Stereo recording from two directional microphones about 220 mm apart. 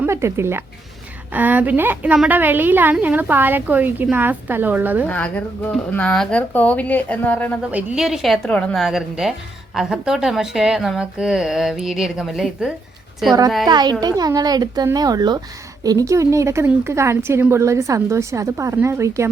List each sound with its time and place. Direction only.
0.0 s a woman's voice: 10° right (ahead or behind)
5.0 s speech: 5° left (ahead or behind)
7.7 s a woman's voice: 5° right (ahead or behind)
13.7 s a child's voice: 20° right (ahead or behind)